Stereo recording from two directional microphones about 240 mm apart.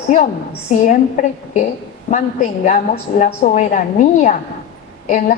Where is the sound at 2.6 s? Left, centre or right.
Left.